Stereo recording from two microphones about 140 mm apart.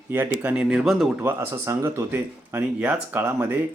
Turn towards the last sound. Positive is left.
turn(degrees=-15)  # may be behind; listen again after turning